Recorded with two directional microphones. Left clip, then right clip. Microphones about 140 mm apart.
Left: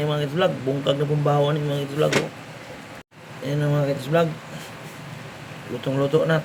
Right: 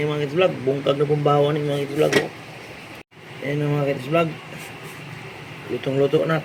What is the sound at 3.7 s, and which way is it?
Speech, 10° left (ahead or behind).